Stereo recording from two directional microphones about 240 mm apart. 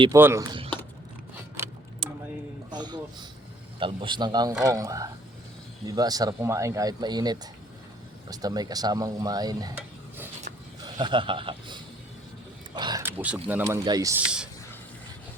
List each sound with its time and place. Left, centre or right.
0.0 s speech: centre
2.0 s a sound: right
3.8 s speech: right; by 14.5 s centre